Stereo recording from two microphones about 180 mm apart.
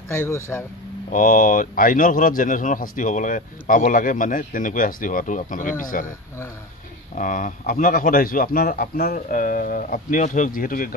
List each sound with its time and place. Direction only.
0.1 s speech: 15° left (ahead or behind)
1.1 s speech: 50° left (ahead or behind)
7.2 s speech: 50° left (ahead or behind)